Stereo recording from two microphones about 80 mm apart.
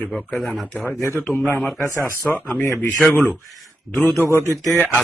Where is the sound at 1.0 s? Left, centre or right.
Left.